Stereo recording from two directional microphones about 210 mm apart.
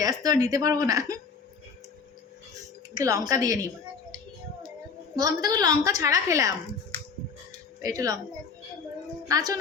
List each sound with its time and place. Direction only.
0.0 s a woman's voice: 15° right (ahead or behind)
3.0 s a woman's voice: 15° right (ahead or behind)
5.1 s a woman's voice: 20° right (ahead or behind)
7.8 s speech: 15° right (ahead or behind)
9.2 s a woman's voice: 20° right (ahead or behind)